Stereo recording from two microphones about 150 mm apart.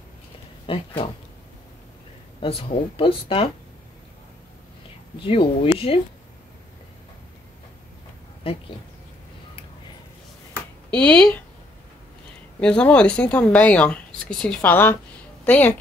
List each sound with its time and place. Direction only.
0.7 s speech: 35° left (ahead or behind)
2.4 s speech: 40° left (ahead or behind)
5.2 s speech: 40° left (ahead or behind)
8.5 s speech: 40° left (ahead or behind)
10.9 s speech: 10° left (ahead or behind)
12.5 s a woman's voice: 5° left (ahead or behind)